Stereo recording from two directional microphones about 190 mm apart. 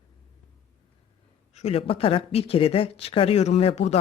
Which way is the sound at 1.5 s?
35° left (ahead or behind).